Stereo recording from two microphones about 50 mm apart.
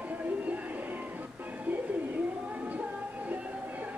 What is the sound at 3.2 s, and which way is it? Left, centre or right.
Music, right.